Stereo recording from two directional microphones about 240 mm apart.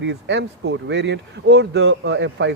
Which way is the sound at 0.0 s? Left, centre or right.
Right.